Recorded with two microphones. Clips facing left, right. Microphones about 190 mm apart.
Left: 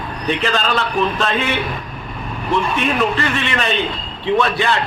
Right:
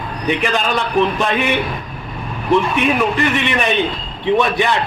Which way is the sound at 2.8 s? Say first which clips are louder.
Right 2 dB; 15° right (ahead or behind).